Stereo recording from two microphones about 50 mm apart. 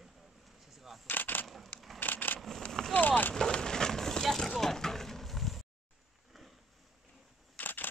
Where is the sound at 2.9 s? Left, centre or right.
Left.